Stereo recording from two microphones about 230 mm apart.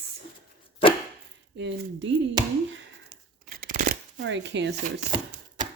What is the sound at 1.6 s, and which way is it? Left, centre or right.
Speech, right.